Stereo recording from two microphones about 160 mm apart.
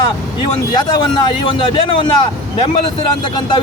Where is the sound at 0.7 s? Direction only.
25° left (ahead or behind).